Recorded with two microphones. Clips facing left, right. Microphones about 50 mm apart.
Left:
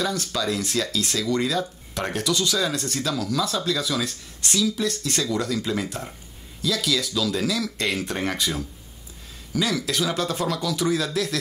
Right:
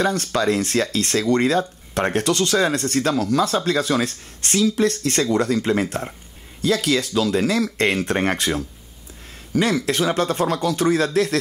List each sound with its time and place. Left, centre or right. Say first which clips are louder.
0.0 s speech: right 6 dB; right